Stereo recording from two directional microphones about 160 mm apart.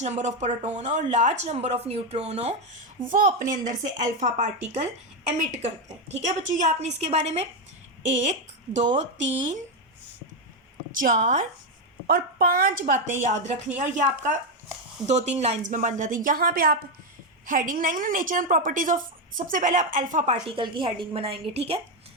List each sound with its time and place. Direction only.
0.0 s speech: 45° right (ahead or behind)
10.9 s a woman's voice: 55° right (ahead or behind)
12.0 s a woman's voice: 70° right (ahead or behind); by 21.8 s 40° right (ahead or behind)